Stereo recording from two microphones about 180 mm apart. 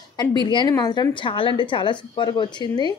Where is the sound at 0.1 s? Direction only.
25° left (ahead or behind).